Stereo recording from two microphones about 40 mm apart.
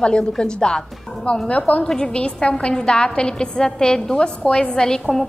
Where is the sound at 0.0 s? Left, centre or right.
Left.